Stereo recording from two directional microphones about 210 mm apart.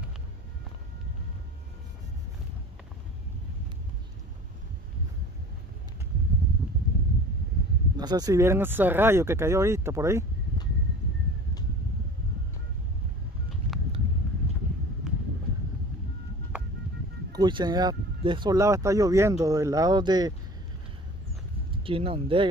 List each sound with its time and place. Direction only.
8.0 s speech: 20° right (ahead or behind)
15.0 s wind: centre (ahead or behind)
17.3 s speech: 20° right (ahead or behind)
21.8 s speech: 25° right (ahead or behind)